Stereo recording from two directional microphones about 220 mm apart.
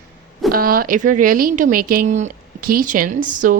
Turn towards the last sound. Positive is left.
turn(degrees=-35)  # may be behind; listen again after turning